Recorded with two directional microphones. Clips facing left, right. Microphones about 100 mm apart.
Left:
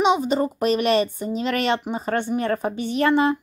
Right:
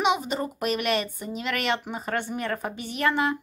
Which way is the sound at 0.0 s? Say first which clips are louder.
Left 6 dB; 30° left (ahead or behind).